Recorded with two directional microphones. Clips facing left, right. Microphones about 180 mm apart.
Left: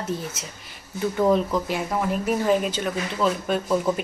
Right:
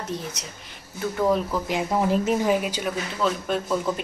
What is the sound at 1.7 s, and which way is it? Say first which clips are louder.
Speech: right 2 dB; 25° right (ahead or behind).